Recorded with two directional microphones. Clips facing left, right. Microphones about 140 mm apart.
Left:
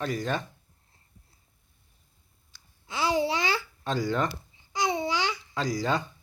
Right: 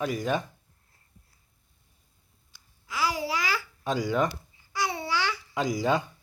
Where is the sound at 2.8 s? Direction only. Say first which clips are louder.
Left 3 dB; 25° left (ahead or behind).